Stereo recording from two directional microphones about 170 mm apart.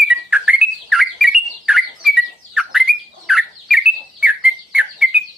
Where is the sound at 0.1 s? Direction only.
10° right (ahead or behind).